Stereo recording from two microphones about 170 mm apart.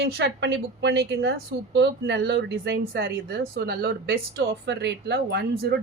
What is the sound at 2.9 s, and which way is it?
Speech, 70° right (ahead or behind).